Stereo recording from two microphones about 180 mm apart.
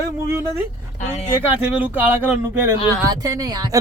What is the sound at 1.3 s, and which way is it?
A man's voice, 10° right (ahead or behind).